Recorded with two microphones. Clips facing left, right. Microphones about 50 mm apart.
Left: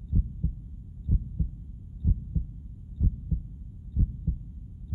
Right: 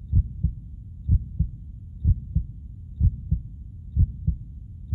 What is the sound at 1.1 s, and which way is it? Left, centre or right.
Heart sounds, centre.